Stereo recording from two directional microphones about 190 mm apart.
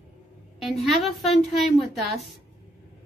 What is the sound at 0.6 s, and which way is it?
A woman's voice, centre (ahead or behind).